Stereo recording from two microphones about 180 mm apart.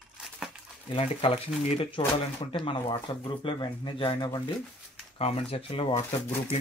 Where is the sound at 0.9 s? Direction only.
35° left (ahead or behind).